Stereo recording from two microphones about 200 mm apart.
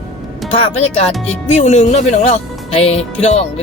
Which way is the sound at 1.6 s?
35° left (ahead or behind).